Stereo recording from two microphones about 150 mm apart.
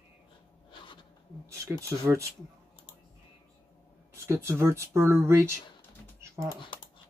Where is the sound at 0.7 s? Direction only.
35° left (ahead or behind).